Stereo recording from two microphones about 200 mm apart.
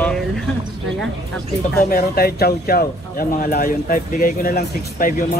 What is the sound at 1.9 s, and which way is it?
Speech, 50° left (ahead or behind).